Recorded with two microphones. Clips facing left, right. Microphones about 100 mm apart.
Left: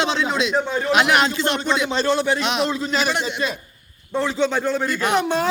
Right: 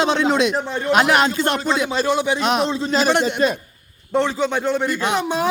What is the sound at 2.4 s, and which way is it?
Speech, 40° right (ahead or behind).